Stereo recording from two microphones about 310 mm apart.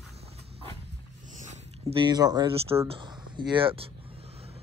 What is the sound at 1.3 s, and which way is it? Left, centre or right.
Speech, centre.